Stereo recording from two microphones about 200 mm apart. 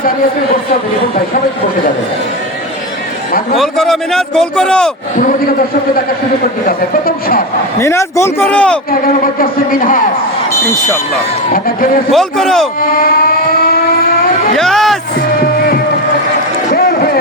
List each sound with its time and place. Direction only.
3.6 s a man's voice: centre (ahead or behind)
5.1 s speech: 40° left (ahead or behind)
7.8 s speech: 15° left (ahead or behind)
8.9 s speech: 45° left (ahead or behind)
10.5 s smoke detector: 15° left (ahead or behind)
12.1 s a man's voice: centre (ahead or behind)
14.5 s speech: centre (ahead or behind)
16.6 s a sound: 45° left (ahead or behind)